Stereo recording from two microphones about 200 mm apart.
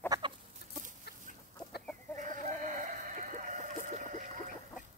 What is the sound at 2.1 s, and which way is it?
Chicken, 40° right (ahead or behind).